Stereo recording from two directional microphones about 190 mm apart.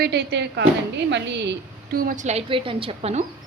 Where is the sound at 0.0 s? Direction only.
60° right (ahead or behind); by 3.2 s 35° right (ahead or behind).